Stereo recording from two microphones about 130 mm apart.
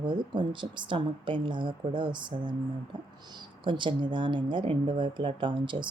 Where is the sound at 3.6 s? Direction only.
40° right (ahead or behind).